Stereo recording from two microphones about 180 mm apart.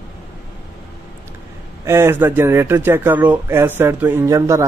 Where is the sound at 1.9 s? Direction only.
15° right (ahead or behind).